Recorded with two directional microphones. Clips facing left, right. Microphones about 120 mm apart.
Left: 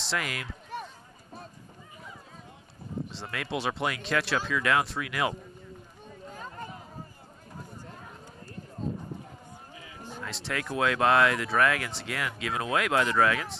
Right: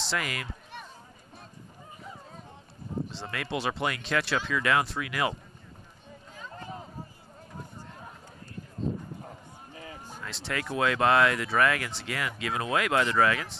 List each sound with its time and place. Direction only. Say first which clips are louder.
0.0 s speech: even; centre (ahead or behind)
3.1 s speech: even; centre (ahead or behind)
9.8 s run: even; 45° right (ahead or behind)
10.2 s speech: even; centre (ahead or behind)